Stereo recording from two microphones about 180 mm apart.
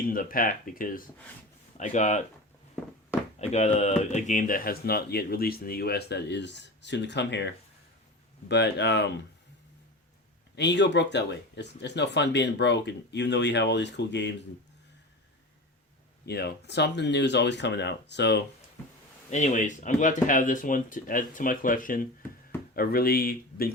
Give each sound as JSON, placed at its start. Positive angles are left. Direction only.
{"t": 0.0, "sound": "speech", "side_deg": 50}
{"t": 3.3, "sound": "speech", "side_deg": 40}
{"t": 10.5, "sound": "speech", "side_deg": 75}
{"t": 16.2, "sound": "speech", "side_deg": 65}
{"t": 19.3, "sound": "speech", "side_deg": 45}